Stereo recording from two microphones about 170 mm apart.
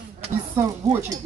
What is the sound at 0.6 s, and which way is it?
Speech, 15° right (ahead or behind).